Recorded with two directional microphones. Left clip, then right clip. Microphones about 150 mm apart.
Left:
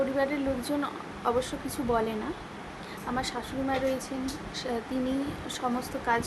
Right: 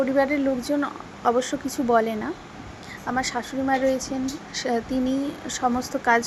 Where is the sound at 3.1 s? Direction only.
35° right (ahead or behind).